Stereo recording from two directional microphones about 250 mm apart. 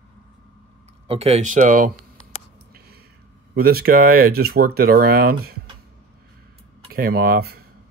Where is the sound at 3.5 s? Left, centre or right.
Right.